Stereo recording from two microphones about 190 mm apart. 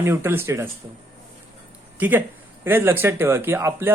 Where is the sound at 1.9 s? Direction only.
10° right (ahead or behind).